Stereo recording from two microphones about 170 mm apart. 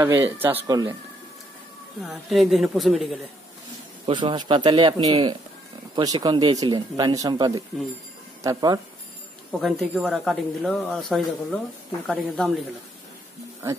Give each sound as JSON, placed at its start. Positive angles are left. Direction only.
{"t": 0.0, "sound": "speech", "side_deg": -15}
{"t": 2.0, "sound": "speech", "side_deg": 0}
{"t": 4.0, "sound": "speech", "side_deg": -30}
{"t": 9.5, "sound": "speech", "side_deg": 0}